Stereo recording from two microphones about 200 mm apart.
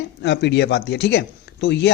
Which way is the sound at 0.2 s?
60° left (ahead or behind).